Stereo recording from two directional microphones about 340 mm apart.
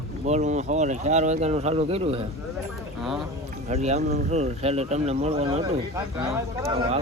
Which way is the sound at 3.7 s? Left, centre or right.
Centre.